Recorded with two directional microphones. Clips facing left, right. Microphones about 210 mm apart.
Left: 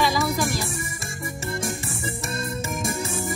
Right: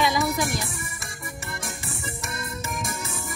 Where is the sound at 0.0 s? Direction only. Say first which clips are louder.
Left 1 dB; 20° right (ahead or behind).